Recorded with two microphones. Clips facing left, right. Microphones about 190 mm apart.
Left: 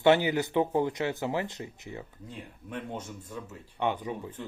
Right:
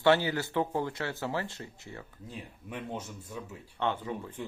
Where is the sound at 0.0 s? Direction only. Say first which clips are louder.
Left 3 dB; 20° left (ahead or behind).